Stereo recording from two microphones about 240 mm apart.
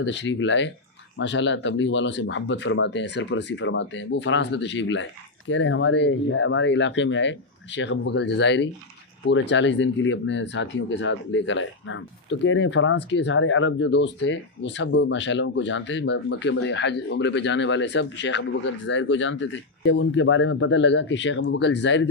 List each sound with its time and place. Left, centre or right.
0.0 s speech: left